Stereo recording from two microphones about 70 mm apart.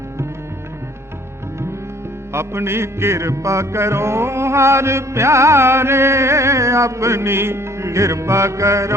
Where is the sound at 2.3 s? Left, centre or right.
Right.